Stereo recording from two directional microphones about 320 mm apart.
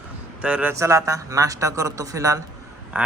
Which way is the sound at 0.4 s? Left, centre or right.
Centre.